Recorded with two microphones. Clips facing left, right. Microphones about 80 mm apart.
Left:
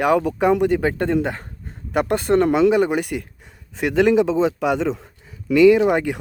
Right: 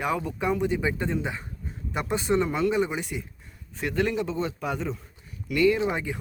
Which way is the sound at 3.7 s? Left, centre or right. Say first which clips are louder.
Left 10 dB; left.